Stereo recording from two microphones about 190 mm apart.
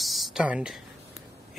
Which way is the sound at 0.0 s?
Centre (ahead or behind).